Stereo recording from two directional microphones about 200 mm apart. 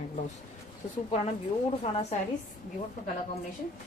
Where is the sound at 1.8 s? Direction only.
30° left (ahead or behind).